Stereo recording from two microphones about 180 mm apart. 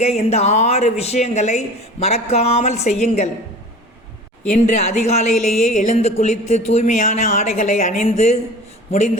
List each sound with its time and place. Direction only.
0.0 s speech: 35° left (ahead or behind)
4.4 s speech: 40° left (ahead or behind)